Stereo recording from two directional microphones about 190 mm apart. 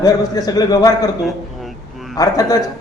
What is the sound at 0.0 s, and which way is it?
Speech, 20° left (ahead or behind).